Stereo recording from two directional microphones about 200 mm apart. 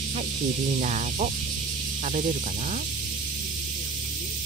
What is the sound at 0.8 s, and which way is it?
Speech, 35° right (ahead or behind).